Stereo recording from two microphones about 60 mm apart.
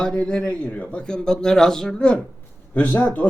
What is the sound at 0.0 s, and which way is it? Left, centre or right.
Speech, centre.